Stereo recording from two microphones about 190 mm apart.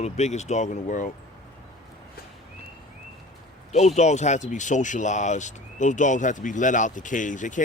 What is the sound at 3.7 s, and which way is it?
Speech, 35° left (ahead or behind).